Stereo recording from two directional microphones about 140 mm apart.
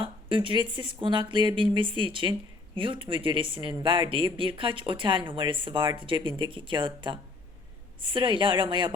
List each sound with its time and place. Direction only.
0.0 s a woman's voice: 40° right (ahead or behind)